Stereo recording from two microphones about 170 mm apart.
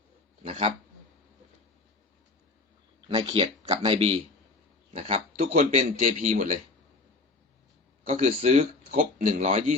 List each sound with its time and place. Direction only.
3.1 s speech: 35° right (ahead or behind)
8.1 s speech: 45° right (ahead or behind)